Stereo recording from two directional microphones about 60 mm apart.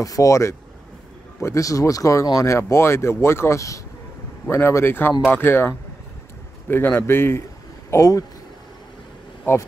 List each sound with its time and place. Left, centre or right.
0.0 s speech: left
4.5 s a man's voice: left
7.9 s speech: left